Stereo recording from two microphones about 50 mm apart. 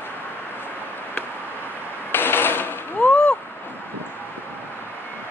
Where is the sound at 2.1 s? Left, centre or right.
Left.